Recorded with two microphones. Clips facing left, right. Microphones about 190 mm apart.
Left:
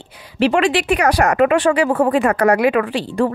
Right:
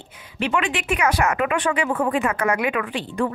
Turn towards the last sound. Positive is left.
turn(degrees=35)  # may be behind; listen again after turning